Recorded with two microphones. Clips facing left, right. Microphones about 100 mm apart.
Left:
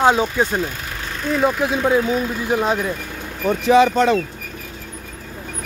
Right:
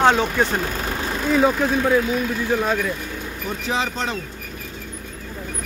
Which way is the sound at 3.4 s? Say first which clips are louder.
Left 12 dB; 70° left (ahead or behind).